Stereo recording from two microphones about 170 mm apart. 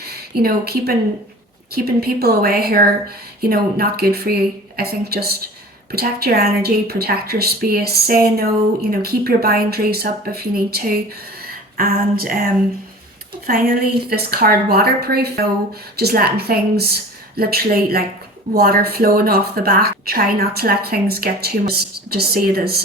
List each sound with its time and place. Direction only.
0.0 s a woman's voice: 65° right (ahead or behind)
13.5 s a woman's voice: 65° right (ahead or behind)